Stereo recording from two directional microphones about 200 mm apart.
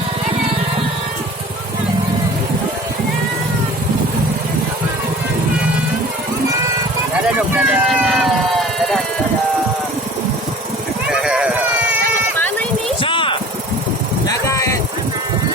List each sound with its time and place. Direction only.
7.5 s a sound: 5° right (ahead or behind)
11.1 s run: 5° right (ahead or behind)
13.0 s vehicle: 25° left (ahead or behind)
14.3 s vehicle: 15° left (ahead or behind)